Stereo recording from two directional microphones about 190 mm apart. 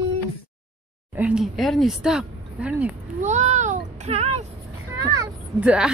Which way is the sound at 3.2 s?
35° right (ahead or behind).